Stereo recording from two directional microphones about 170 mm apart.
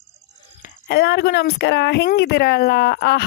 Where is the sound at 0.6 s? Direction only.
70° left (ahead or behind).